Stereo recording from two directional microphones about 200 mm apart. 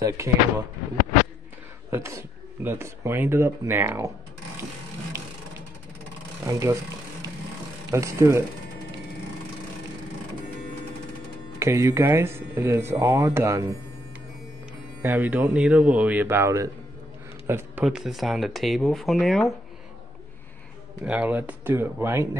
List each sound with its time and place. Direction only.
0.0 s speech: 15° right (ahead or behind)
1.9 s speech: 15° right (ahead or behind)
6.4 s speech: 15° right (ahead or behind)
11.6 s speech: 15° right (ahead or behind)
15.0 s speech: 10° right (ahead or behind)
17.5 s a sound: 10° right (ahead or behind)
17.8 s speech: centre (ahead or behind)
21.0 s speech: 5° right (ahead or behind)